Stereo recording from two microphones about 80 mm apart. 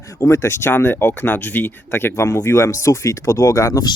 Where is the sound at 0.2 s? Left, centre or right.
Left.